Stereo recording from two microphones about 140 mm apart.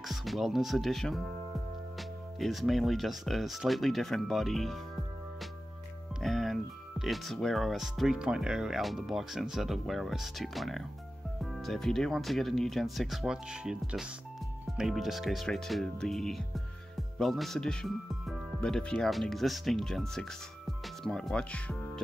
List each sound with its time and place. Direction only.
0.0 s speech: centre (ahead or behind)
6.2 s speech: centre (ahead or behind)